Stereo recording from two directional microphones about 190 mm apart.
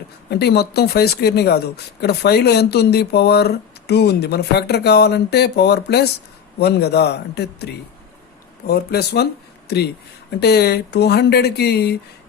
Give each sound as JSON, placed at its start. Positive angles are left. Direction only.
{"t": 0.3, "sound": "speech", "side_deg": 60}